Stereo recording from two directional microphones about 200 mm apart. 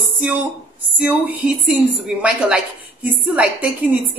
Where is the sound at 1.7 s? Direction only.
5° right (ahead or behind).